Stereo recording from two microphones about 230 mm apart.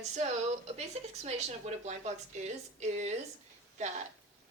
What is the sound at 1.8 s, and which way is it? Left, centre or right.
Speech, right.